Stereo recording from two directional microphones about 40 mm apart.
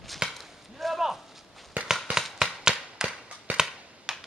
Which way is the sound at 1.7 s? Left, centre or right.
Right.